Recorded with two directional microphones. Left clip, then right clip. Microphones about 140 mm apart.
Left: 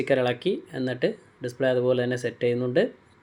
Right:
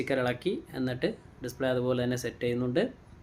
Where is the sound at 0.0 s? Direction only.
15° left (ahead or behind).